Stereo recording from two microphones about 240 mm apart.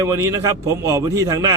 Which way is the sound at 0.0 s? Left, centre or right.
Centre.